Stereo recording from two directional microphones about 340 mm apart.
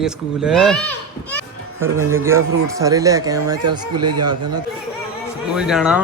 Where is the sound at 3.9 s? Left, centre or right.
Right.